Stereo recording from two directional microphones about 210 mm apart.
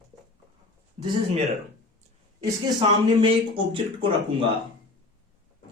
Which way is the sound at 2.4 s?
20° right (ahead or behind).